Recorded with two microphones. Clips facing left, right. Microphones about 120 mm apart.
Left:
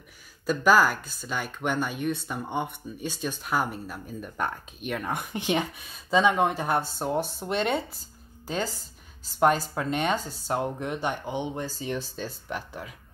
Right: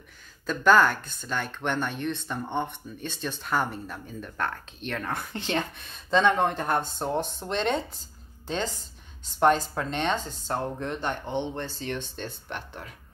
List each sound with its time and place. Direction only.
0.5 s speech: 5° left (ahead or behind)